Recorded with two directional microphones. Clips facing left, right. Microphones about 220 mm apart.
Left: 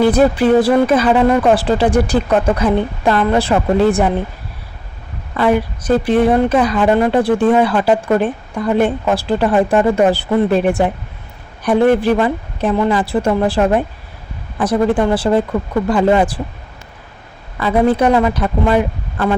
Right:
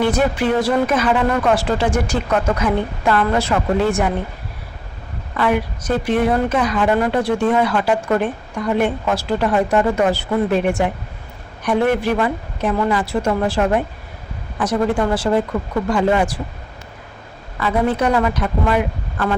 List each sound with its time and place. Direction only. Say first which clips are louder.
0.2 s speech: left 6 dB; 35° left (ahead or behind)
5.4 s speech: left 4 dB; 35° left (ahead or behind)
15.1 s speech: left 3 dB; 35° left (ahead or behind)
17.6 s speech: left 5 dB; 30° left (ahead or behind)